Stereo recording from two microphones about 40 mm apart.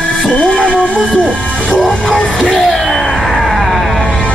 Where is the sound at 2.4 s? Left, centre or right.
Centre.